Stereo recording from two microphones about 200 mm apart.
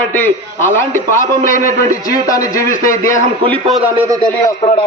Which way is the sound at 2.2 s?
15° left (ahead or behind).